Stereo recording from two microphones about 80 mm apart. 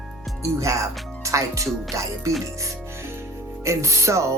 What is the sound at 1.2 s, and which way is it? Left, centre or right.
Speech, right.